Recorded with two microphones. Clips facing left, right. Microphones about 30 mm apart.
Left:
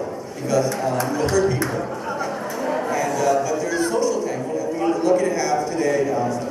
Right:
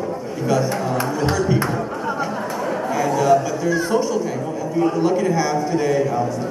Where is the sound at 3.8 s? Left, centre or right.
Centre.